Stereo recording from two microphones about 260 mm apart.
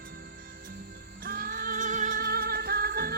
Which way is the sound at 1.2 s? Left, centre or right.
Right.